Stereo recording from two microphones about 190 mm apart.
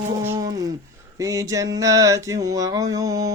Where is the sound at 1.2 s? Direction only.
15° right (ahead or behind).